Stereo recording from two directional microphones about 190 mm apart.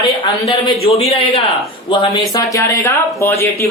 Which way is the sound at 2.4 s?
15° left (ahead or behind).